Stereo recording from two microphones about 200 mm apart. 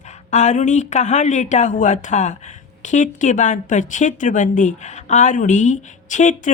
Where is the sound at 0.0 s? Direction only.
35° left (ahead or behind).